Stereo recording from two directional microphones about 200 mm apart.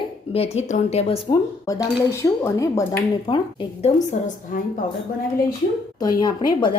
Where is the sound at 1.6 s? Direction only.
15° left (ahead or behind).